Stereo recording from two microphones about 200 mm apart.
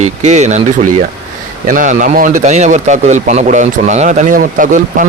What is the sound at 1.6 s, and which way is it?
A man's voice, 40° right (ahead or behind).